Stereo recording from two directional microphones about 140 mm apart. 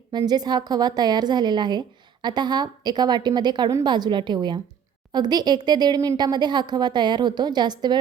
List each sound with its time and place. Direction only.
0.1 s speech: 30° right (ahead or behind)